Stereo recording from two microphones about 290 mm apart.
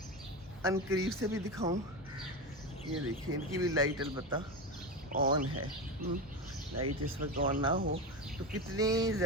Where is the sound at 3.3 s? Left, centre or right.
Right.